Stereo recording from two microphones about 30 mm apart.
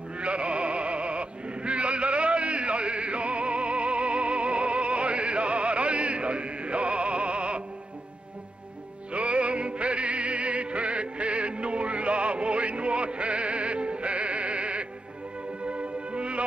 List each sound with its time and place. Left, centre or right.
0.2 s music: right
9.1 s music: right